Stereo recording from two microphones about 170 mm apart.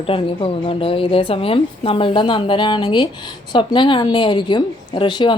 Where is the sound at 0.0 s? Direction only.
30° left (ahead or behind).